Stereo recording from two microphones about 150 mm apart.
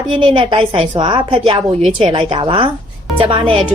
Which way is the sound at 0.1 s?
35° right (ahead or behind).